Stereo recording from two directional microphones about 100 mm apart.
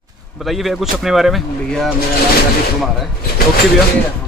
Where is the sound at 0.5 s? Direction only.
Centre (ahead or behind).